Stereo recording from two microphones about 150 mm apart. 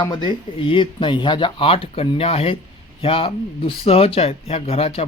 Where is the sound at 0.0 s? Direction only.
30° left (ahead or behind).